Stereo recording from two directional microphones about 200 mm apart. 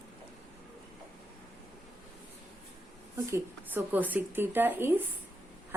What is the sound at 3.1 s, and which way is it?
Speech, 15° right (ahead or behind).